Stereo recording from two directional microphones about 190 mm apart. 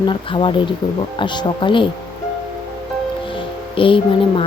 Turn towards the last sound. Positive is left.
turn(degrees=25)  # may be behind; listen again after turning